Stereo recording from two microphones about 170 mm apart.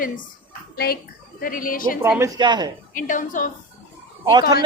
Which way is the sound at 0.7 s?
65° left (ahead or behind).